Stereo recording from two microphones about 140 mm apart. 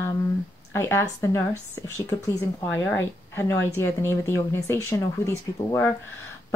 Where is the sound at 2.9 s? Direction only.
15° left (ahead or behind).